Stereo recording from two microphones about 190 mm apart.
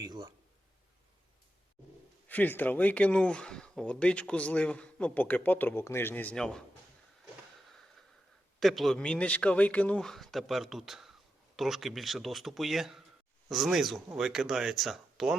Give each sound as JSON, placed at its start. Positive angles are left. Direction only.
{"t": 0.0, "sound": "speech", "side_deg": -20}
{"t": 2.2, "sound": "speech", "side_deg": 10}
{"t": 7.7, "sound": "a sound", "side_deg": 0}
{"t": 8.6, "sound": "speech", "side_deg": 0}